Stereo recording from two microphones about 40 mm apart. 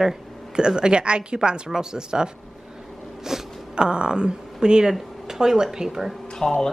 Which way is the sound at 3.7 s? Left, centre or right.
Right.